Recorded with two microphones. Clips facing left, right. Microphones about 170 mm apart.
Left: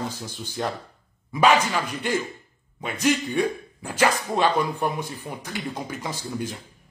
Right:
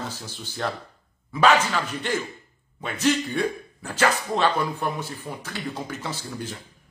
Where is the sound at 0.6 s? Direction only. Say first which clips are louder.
Left 1 dB; 10° left (ahead or behind).